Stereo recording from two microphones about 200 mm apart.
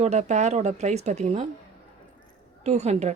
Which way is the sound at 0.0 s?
35° right (ahead or behind).